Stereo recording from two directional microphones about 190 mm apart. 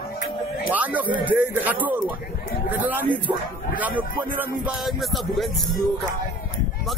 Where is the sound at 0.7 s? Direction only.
10° right (ahead or behind).